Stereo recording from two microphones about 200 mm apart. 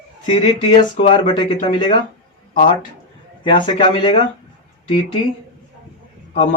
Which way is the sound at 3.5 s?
25° left (ahead or behind).